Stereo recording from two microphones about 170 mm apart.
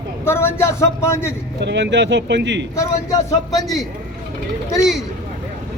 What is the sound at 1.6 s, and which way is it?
Speech, 90° right.